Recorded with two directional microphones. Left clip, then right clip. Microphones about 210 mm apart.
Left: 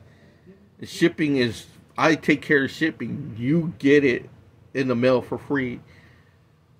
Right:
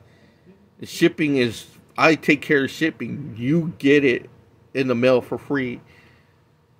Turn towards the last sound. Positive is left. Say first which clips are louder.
# right 1 dB
turn(degrees=-20)  # may be behind; listen again after turning